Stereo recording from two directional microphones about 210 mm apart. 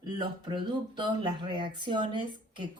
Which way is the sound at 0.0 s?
20° right (ahead or behind).